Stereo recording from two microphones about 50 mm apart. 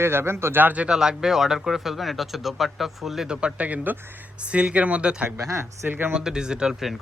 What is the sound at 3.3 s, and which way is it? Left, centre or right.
Speech, right.